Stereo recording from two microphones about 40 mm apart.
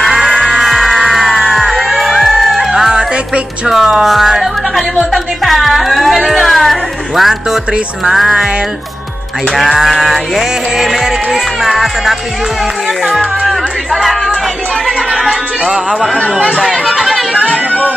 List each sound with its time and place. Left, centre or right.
0.1 s music: centre
2.7 s music: centre
9.6 s music: centre
13.5 s a sound: centre
15.2 s music: centre
16.0 s music: centre
16.8 s chatter: centre